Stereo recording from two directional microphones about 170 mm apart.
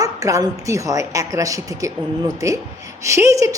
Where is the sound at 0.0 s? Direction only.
20° right (ahead or behind).